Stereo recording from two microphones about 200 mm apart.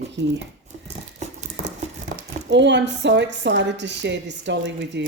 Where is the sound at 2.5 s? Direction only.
60° right (ahead or behind).